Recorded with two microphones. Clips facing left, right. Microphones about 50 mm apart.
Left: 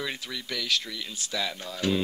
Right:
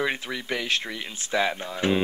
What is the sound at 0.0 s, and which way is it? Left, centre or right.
Speech, right.